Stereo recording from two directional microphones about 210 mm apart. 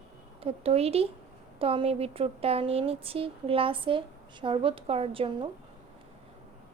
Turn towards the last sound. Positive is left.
turn(degrees=-25)  # may be behind; listen again after turning